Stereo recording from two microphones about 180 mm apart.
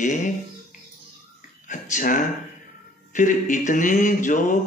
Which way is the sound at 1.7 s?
45° left (ahead or behind).